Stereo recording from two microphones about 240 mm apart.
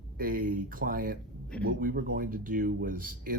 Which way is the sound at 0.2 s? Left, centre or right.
Right.